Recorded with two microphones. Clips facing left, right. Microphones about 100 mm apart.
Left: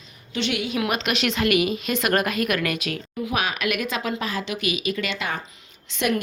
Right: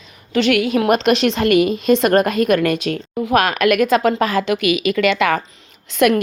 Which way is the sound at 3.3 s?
55° right (ahead or behind).